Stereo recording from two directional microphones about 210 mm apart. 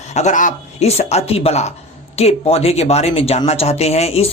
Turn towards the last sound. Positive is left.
turn(degrees=30)  # may be behind; listen again after turning